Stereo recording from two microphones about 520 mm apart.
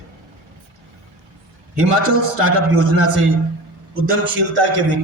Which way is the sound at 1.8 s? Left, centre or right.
Right.